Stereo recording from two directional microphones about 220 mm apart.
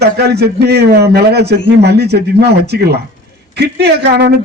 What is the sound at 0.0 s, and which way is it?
A man's voice, 45° right (ahead or behind).